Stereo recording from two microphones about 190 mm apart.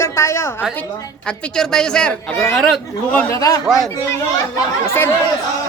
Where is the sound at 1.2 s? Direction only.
5° left (ahead or behind); by 3.6 s 20° left (ahead or behind).